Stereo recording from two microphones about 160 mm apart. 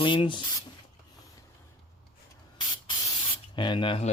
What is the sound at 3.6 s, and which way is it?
Speech, 30° left (ahead or behind).